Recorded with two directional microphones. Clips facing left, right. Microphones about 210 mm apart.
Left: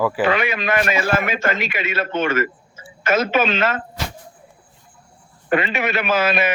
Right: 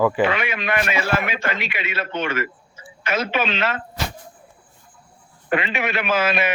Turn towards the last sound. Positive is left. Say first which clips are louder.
# left 2 dB
turn(degrees=40)  # may be behind; listen again after turning